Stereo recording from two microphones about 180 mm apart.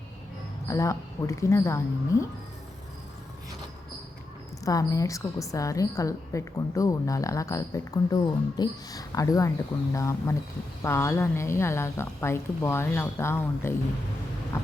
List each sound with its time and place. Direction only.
0.7 s a woman's voice: 15° left (ahead or behind)
4.6 s a woman's voice: 20° left (ahead or behind)